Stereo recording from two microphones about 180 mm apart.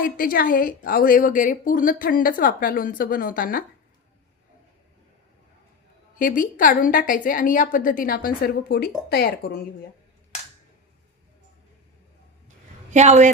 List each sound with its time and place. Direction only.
0.0 s a woman's voice: 50° left (ahead or behind)
6.1 s a woman's voice: 50° left (ahead or behind)
12.9 s speech: 40° right (ahead or behind)